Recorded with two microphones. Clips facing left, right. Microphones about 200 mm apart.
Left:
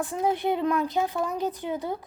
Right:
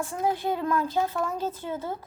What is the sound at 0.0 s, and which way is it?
Speech, 20° left (ahead or behind).